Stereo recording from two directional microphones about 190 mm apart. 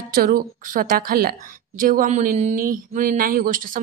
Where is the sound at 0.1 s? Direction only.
50° right (ahead or behind).